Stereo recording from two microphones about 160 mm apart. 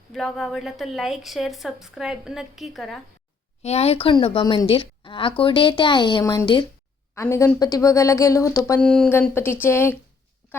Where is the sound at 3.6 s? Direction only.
40° left (ahead or behind); by 8.8 s 15° left (ahead or behind).